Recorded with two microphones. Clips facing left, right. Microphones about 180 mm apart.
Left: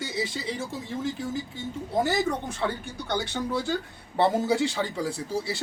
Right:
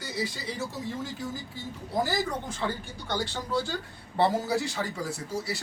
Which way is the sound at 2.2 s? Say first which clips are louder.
Left 4 dB; 65° left (ahead or behind).